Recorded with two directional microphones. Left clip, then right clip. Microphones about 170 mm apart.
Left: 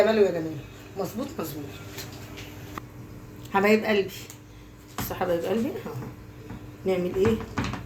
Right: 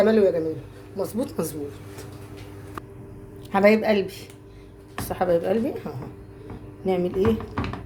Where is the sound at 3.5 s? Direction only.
90° right.